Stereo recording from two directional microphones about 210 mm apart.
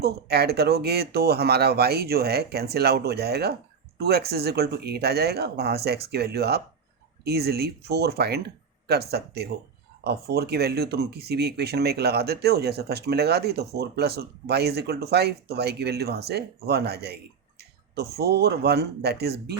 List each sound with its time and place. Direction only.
0.0 s speech: 50° right (ahead or behind)